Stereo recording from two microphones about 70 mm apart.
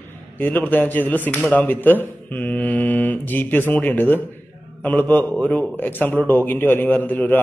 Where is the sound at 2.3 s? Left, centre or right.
Left.